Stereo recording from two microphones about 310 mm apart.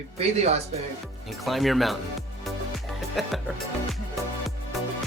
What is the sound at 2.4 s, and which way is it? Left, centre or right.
Music, centre.